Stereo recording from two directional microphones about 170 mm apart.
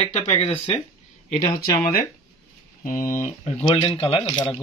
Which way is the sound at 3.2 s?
40° left (ahead or behind).